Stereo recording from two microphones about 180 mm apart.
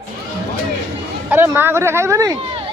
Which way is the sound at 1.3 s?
15° right (ahead or behind).